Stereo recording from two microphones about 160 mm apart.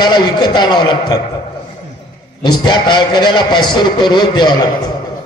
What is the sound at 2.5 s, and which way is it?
A man's voice, 30° left (ahead or behind).